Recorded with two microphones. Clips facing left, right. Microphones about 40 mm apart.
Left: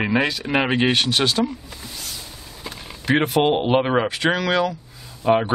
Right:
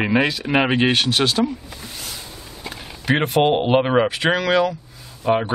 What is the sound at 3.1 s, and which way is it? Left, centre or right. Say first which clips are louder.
Speech: right 1 dB; centre.